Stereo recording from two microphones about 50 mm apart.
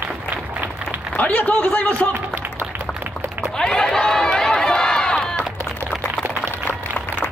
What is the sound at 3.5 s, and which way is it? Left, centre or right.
Run, centre.